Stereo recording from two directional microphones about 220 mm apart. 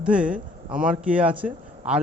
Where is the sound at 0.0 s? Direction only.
5° right (ahead or behind).